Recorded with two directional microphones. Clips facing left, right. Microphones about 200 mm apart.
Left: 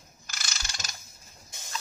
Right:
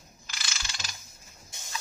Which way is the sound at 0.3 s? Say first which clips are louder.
Even; 45° left (ahead or behind).